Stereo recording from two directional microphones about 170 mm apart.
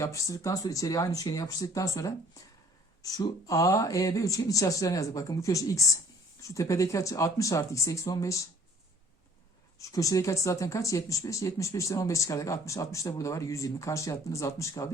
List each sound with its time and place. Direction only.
0.0 s speech: 20° left (ahead or behind)
9.7 s speech: 20° left (ahead or behind)